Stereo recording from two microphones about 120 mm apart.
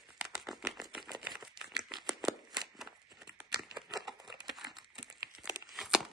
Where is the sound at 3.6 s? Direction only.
5° right (ahead or behind).